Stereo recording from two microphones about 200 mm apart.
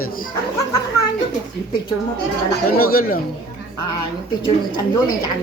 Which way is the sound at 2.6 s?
45° left (ahead or behind).